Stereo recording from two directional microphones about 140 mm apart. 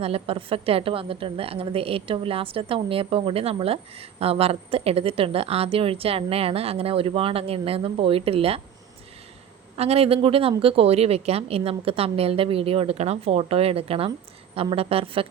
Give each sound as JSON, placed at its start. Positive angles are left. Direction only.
{"t": 0.0, "sound": "a woman's voice", "side_deg": -45}
{"t": 9.7, "sound": "a woman's voice", "side_deg": -45}